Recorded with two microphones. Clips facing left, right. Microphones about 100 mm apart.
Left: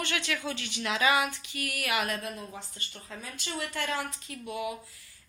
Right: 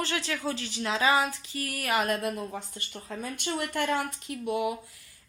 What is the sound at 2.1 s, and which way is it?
Speech, 55° right (ahead or behind).